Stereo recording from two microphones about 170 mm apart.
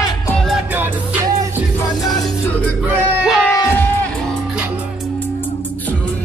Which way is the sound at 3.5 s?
15° left (ahead or behind).